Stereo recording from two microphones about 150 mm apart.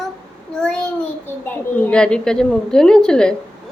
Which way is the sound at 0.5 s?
5° left (ahead or behind).